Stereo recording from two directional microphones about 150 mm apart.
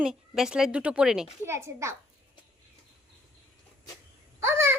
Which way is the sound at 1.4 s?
20° right (ahead or behind).